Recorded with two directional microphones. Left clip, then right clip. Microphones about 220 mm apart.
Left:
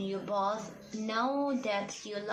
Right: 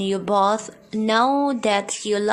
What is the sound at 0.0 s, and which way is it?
Speech, 55° right (ahead or behind).